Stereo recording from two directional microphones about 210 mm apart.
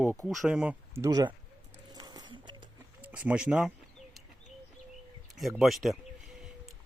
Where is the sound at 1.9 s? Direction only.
20° right (ahead or behind).